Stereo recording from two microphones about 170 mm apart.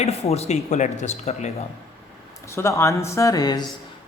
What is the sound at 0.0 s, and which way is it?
Speech, 40° left (ahead or behind).